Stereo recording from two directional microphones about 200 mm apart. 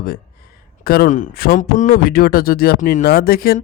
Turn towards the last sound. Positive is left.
turn(degrees=50)  # may be behind; listen again after turning